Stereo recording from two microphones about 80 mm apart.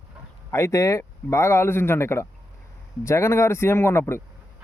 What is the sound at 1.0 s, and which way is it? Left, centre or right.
Speech, left.